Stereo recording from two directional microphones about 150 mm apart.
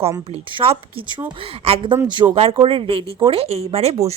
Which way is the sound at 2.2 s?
25° right (ahead or behind).